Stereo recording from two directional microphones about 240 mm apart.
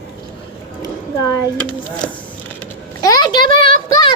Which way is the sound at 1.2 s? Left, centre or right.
Centre.